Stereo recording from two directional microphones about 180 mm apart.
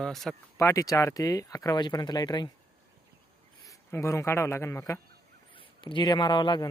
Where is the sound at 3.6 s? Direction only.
15° left (ahead or behind).